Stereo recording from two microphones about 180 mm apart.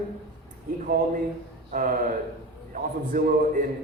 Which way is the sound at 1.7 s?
50° right (ahead or behind).